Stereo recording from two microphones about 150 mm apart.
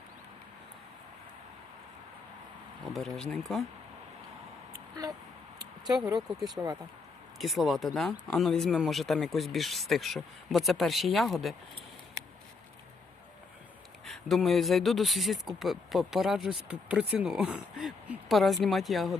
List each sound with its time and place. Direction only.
2.9 s speech: centre (ahead or behind)
5.0 s speech: 20° right (ahead or behind)
6.6 s speech: 15° right (ahead or behind)
7.3 s speech: centre (ahead or behind)
14.0 s speech: centre (ahead or behind)